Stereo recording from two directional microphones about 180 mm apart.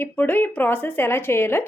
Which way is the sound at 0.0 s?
10° left (ahead or behind).